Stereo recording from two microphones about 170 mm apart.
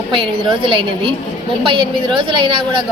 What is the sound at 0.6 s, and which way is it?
A woman's voice, 30° right (ahead or behind).